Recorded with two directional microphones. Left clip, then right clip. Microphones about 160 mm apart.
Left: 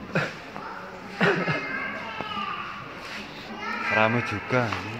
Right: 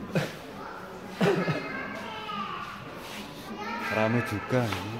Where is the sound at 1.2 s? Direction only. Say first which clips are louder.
Left 3 dB; centre (ahead or behind).